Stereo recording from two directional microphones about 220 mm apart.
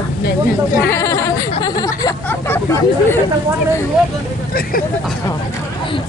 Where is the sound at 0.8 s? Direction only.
10° left (ahead or behind).